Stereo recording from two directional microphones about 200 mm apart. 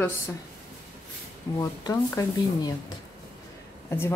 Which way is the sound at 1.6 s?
20° left (ahead or behind).